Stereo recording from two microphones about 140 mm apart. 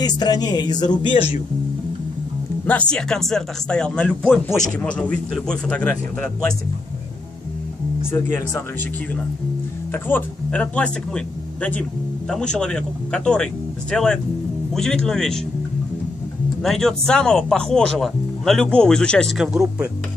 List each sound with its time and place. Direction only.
0.0 s speech: 30° left (ahead or behind)
1.1 s speech: 50° left (ahead or behind)
2.9 s speech: 5° left (ahead or behind)
4.2 s speech: 5° right (ahead or behind)
4.8 s speech: 10° left (ahead or behind)
8.1 s speech: 15° left (ahead or behind)
10.0 s speech: 10° left (ahead or behind)
16.6 s speech: 5° left (ahead or behind)